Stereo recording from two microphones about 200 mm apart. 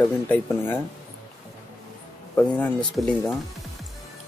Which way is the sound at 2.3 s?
5° left (ahead or behind).